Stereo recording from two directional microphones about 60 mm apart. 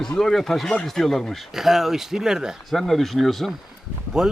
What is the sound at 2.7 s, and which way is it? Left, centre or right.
Speech, centre.